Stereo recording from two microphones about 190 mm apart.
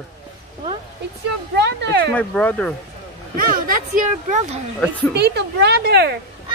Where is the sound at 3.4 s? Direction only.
45° right (ahead or behind).